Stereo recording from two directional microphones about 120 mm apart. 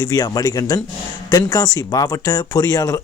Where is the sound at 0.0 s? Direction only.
30° left (ahead or behind).